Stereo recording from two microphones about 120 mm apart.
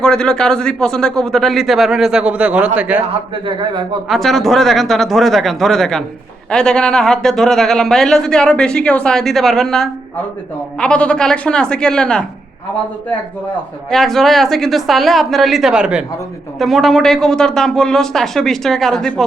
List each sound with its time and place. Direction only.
0.0 s a man's voice: 5° left (ahead or behind); by 3.0 s 10° right (ahead or behind)
3.4 s a man's voice: 40° right (ahead or behind)
4.1 s speech: centre (ahead or behind)
13.9 s speech: 5° left (ahead or behind)